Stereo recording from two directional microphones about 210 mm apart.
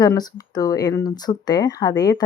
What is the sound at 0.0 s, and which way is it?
Speech, 20° left (ahead or behind).